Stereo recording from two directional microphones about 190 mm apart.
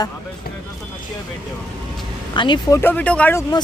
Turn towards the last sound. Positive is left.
turn(degrees=15)  # may be behind; listen again after turning